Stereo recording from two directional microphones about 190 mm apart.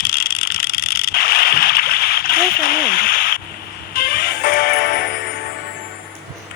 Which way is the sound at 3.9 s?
50° left (ahead or behind).